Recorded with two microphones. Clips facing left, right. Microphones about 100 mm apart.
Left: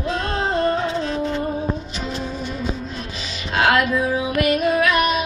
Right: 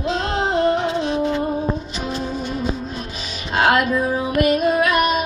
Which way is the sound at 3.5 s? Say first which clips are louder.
Right 1 dB; 25° right (ahead or behind).